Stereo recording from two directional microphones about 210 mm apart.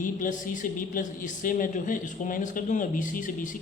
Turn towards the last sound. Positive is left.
turn(degrees=40)  # may be behind; listen again after turning